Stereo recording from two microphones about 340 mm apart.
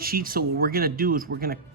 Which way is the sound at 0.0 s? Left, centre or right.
Right.